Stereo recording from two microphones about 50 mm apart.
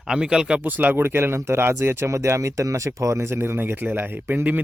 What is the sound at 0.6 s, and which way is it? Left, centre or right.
Speech, right.